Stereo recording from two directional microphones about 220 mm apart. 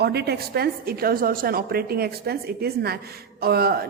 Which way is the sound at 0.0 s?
50° right (ahead or behind).